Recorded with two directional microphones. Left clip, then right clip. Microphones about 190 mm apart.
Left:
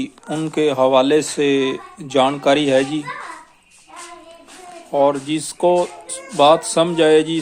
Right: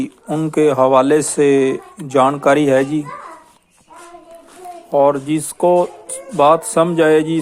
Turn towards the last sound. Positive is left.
turn(degrees=-30)  # may be behind; listen again after turning